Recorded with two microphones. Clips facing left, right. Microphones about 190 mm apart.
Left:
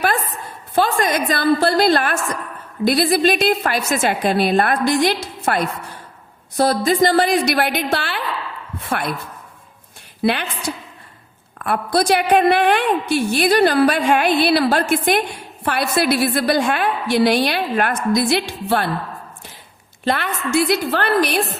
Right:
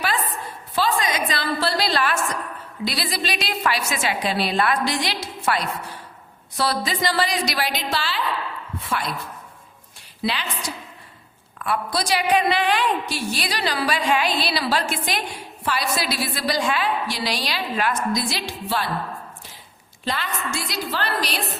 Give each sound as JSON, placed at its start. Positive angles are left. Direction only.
{"t": 0.8, "sound": "a woman's voice", "side_deg": 50}
{"t": 10.2, "sound": "a woman's voice", "side_deg": 55}
{"t": 11.6, "sound": "a woman's voice", "side_deg": 55}
{"t": 20.1, "sound": "a woman's voice", "side_deg": 60}